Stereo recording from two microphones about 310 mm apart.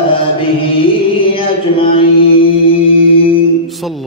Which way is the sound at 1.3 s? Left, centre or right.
Centre.